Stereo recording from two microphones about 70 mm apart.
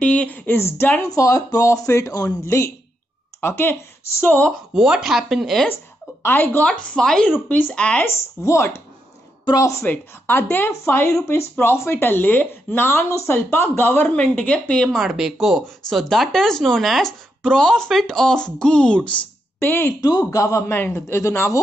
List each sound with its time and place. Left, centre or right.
0.0 s speech: centre
1.0 s speech: left
3.3 s speech: left
4.7 s speech: centre
6.2 s speech: left
6.6 s speech: centre
7.4 s speech: left
8.0 s speech: left
9.8 s a woman's voice: left; by 15.0 s centre
15.0 s speech: centre
15.9 s speech: centre
19.6 s a woman's voice: left
20.0 s speech: left
20.2 s a woman's voice: left